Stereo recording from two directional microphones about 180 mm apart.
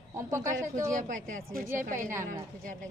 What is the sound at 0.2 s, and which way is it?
Speech, 15° right (ahead or behind).